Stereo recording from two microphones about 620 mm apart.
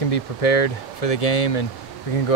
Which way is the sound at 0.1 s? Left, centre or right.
Left.